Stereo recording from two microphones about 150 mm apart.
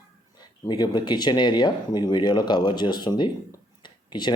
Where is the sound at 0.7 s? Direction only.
30° left (ahead or behind).